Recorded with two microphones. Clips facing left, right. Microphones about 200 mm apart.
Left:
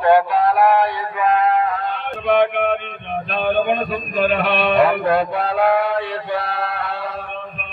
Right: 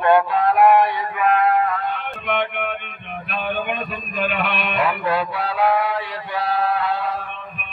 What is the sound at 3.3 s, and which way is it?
A man's voice, 35° left (ahead or behind).